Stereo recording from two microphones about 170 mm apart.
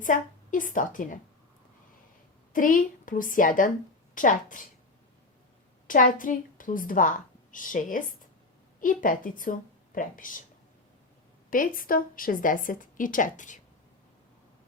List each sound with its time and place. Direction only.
0.0 s speech: 50° left (ahead or behind)
2.5 s speech: 55° left (ahead or behind)
5.9 s a woman's voice: 50° left (ahead or behind)
11.5 s speech: 55° left (ahead or behind)